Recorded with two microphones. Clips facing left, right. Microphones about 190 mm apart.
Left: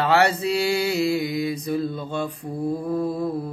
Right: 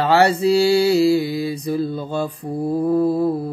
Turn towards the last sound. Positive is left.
turn(degrees=-35)  # may be behind; listen again after turning